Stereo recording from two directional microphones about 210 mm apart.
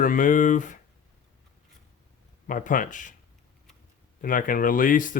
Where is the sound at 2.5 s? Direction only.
40° left (ahead or behind).